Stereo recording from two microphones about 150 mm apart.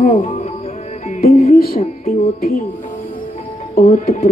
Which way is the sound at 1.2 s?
65° left (ahead or behind).